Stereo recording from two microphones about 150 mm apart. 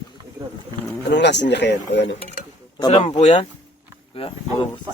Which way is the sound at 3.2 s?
45° left (ahead or behind).